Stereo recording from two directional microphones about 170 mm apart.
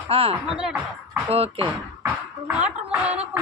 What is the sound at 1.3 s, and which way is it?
Speech, 35° right (ahead or behind).